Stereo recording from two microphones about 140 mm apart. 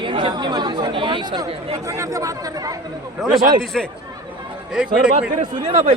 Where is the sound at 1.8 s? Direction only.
20° right (ahead or behind).